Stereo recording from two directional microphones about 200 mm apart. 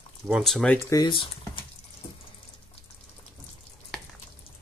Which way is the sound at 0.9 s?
20° left (ahead or behind).